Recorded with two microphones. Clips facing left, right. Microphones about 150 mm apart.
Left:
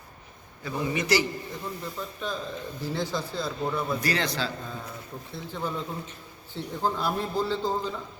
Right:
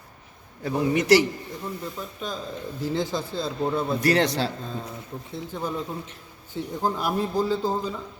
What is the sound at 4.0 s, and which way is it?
Speech, 65° right (ahead or behind).